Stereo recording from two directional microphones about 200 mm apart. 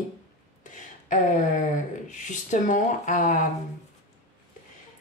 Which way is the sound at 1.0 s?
40° left (ahead or behind).